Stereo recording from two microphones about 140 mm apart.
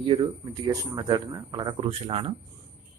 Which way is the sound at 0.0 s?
40° right (ahead or behind).